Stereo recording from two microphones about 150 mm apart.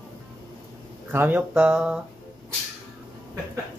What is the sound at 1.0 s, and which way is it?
Speech, 10° right (ahead or behind).